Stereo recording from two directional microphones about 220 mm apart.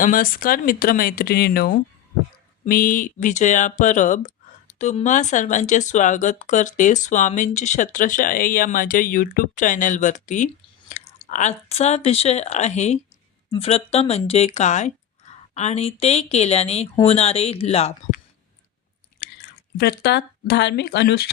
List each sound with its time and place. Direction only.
0.0 s speech: 40° left (ahead or behind)
19.2 s chewing: 45° left (ahead or behind)
19.7 s speech: 45° left (ahead or behind)